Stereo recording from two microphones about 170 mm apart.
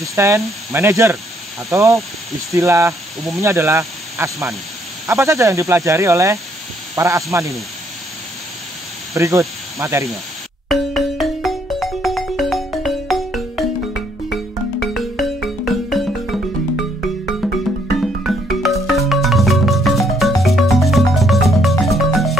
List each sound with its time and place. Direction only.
0.0 s speech: 15° right (ahead or behind)
9.1 s speech: 20° right (ahead or behind)
10.7 s music: centre (ahead or behind)
17.9 s music: centre (ahead or behind)